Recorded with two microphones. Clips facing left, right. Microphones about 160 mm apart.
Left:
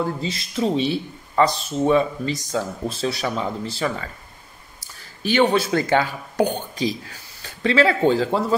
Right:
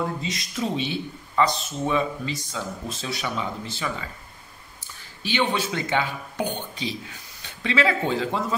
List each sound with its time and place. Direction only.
0.0 s speech: 30° left (ahead or behind)